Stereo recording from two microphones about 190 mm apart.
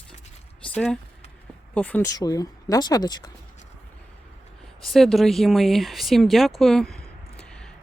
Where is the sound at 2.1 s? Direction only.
20° left (ahead or behind).